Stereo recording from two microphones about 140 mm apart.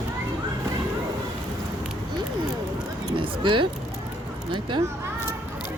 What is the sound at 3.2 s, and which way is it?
Speech, 35° right (ahead or behind).